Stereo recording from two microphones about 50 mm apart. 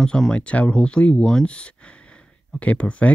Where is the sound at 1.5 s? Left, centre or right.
Left.